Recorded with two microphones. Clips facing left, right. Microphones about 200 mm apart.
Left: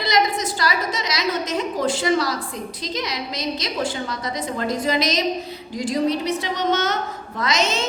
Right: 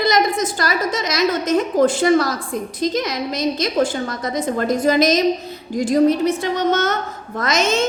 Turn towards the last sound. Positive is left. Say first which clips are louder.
# right 4 dB
turn(degrees=-50)  # may be behind; listen again after turning